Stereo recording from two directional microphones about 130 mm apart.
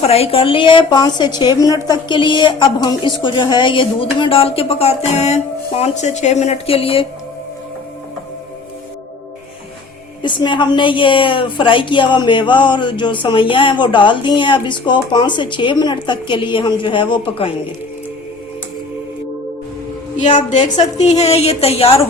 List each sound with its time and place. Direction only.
0.0 s a woman's voice: 50° left (ahead or behind)
10.2 s a woman's voice: 35° left (ahead or behind)
20.1 s a woman's voice: 65° left (ahead or behind)
21.0 s a woman's voice: 55° left (ahead or behind)